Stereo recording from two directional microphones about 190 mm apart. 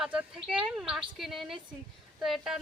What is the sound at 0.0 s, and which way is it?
Speech, 5° right (ahead or behind).